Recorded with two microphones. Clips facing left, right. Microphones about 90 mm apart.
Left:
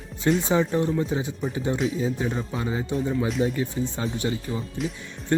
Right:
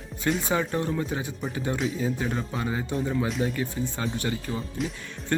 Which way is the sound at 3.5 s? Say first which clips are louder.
Left 2 dB; 20° left (ahead or behind).